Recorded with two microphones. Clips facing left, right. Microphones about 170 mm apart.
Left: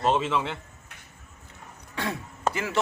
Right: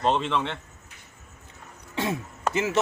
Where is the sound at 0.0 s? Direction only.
5° left (ahead or behind).